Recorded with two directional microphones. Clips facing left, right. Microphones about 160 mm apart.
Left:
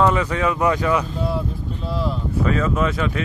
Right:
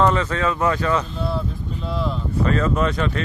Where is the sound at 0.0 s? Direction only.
10° left (ahead or behind).